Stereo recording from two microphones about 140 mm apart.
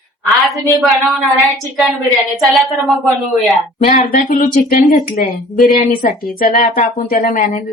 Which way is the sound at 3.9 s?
90° left.